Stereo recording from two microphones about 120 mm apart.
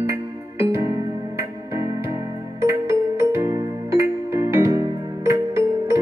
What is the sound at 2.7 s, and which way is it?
Music, 25° right (ahead or behind).